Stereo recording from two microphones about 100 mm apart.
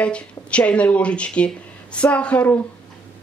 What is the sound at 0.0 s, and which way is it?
Speech, 10° left (ahead or behind).